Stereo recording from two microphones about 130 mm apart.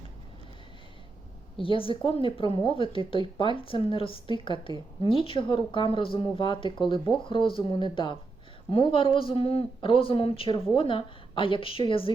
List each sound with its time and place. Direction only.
1.5 s speech: 45° left (ahead or behind)